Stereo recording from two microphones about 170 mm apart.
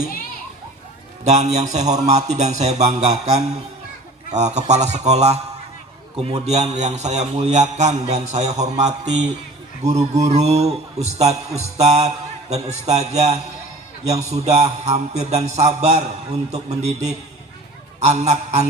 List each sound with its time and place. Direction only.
1.2 s a man's voice: 45° right (ahead or behind)
4.7 s mantra: 40° right (ahead or behind)
6.4 s a man's voice: 40° right (ahead or behind)
9.8 s mantra: 40° right (ahead or behind)
12.5 s a man's voice: 40° right (ahead or behind)
14.3 s mantra: 40° right (ahead or behind)
18.0 s a man's voice: 40° right (ahead or behind)